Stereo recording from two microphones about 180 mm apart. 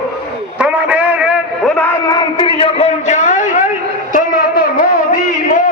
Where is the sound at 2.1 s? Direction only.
25° left (ahead or behind); by 4.9 s 50° left (ahead or behind).